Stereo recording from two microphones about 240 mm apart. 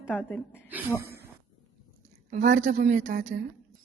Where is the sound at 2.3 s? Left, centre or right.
Right.